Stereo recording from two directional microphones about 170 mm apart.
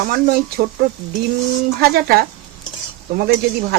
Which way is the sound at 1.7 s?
65° right (ahead or behind).